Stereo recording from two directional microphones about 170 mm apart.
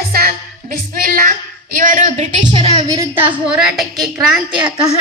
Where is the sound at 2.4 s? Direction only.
25° right (ahead or behind).